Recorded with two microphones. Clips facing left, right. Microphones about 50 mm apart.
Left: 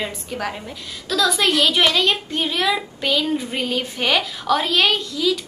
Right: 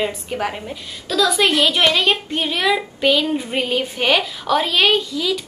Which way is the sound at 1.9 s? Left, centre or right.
Right.